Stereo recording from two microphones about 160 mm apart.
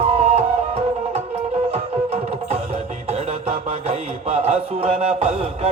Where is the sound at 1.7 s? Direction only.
40° right (ahead or behind).